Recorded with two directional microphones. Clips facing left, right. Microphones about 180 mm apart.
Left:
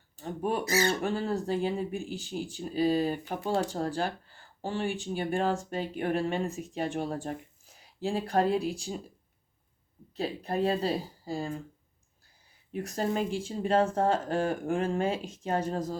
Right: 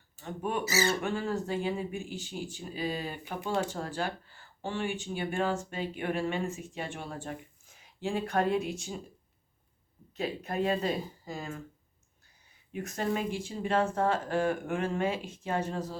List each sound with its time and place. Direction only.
0.2 s speech: 35° left (ahead or behind)
0.6 s speech: 5° right (ahead or behind)
0.9 s speech: 35° left (ahead or behind)
10.2 s speech: 35° left (ahead or behind)
12.7 s speech: 35° left (ahead or behind)